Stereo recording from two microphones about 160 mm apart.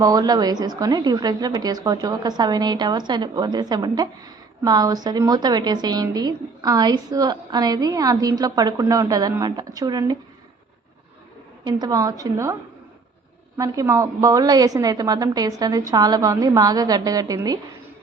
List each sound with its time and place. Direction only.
0.0 s a woman's voice: 25° right (ahead or behind)
11.6 s a woman's voice: 25° right (ahead or behind)
13.6 s a woman's voice: 20° right (ahead or behind)